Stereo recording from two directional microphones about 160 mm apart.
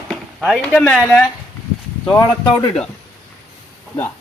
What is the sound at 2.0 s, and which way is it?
Speech, 10° left (ahead or behind).